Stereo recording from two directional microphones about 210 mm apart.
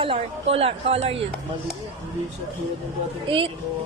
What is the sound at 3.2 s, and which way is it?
Speech, 25° right (ahead or behind).